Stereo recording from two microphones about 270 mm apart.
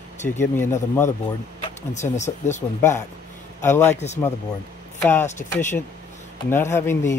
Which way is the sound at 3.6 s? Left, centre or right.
Centre.